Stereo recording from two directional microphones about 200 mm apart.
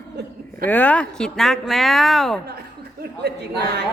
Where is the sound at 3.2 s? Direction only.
55° right (ahead or behind).